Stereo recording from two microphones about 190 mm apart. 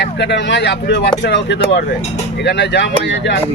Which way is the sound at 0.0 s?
65° left (ahead or behind).